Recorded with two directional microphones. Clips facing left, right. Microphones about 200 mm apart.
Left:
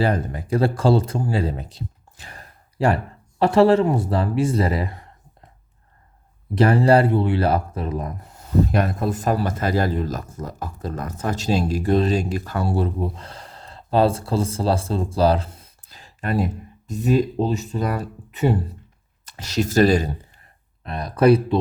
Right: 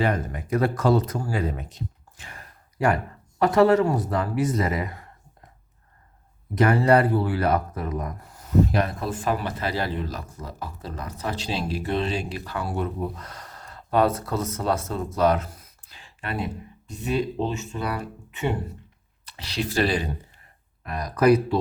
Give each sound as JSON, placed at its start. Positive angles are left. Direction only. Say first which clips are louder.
{"t": 0.0, "sound": "speech", "louder": "left 3 dB", "side_deg": 30}
{"t": 6.5, "sound": "speech", "louder": "left 3 dB", "side_deg": 30}
{"t": 8.7, "sound": "speech", "louder": "left 4 dB", "side_deg": 45}
{"t": 12.6, "sound": "speech", "louder": "left 4 dB", "side_deg": 30}
{"t": 15.9, "sound": "speech", "louder": "left 7 dB", "side_deg": 40}
{"t": 20.8, "sound": "speech", "louder": "left 3 dB", "side_deg": 30}